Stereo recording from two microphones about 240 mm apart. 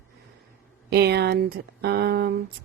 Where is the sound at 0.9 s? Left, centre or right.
Right.